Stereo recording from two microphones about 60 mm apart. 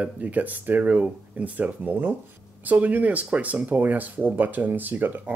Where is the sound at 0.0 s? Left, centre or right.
Right.